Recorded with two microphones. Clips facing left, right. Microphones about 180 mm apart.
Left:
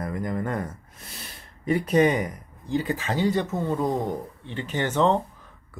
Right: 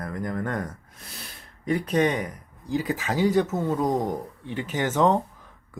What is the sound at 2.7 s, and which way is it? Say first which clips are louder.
Speech: even; 5° right (ahead or behind).